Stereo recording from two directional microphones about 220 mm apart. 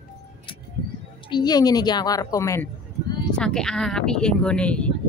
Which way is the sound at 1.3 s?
20° left (ahead or behind).